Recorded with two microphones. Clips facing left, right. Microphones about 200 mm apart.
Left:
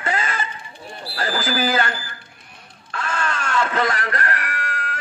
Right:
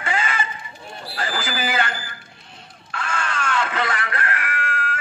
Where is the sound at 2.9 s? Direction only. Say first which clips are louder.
Left 2 dB; 40° left (ahead or behind).